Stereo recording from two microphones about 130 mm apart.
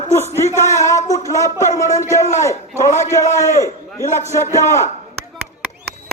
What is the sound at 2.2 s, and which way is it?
Speech, 65° left (ahead or behind).